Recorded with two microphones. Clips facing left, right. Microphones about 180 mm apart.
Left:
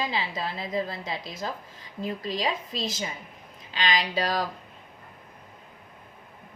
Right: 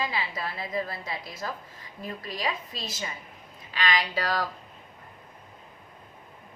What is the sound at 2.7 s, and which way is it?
Speech, 90° left.